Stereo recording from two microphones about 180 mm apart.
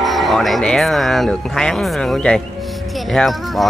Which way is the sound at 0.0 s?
Centre (ahead or behind).